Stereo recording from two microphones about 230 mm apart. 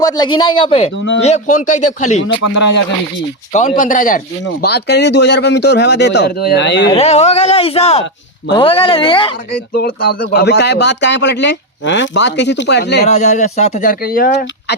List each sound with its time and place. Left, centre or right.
0.0 s speech: centre
0.9 s speech: left
1.6 s speech: left
3.5 s speech: left
4.4 s speech: left
6.9 s speech: left
9.7 s speech: left
13.1 s speech: left